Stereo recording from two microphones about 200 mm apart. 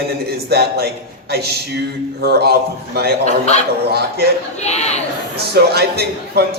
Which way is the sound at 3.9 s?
50° right (ahead or behind).